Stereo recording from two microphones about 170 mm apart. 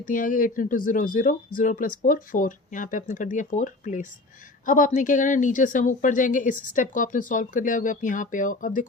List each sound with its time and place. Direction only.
0.0 s speech: 50° left (ahead or behind)